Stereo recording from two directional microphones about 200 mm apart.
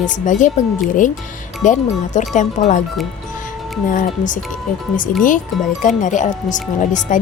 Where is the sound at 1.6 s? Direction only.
40° left (ahead or behind).